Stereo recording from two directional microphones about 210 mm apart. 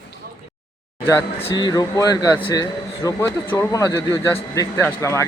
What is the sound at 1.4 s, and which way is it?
Speech, 20° left (ahead or behind).